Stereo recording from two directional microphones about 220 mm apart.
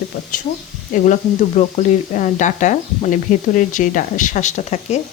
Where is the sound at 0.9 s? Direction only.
35° left (ahead or behind).